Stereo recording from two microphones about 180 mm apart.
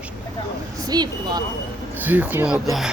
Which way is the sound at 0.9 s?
20° right (ahead or behind).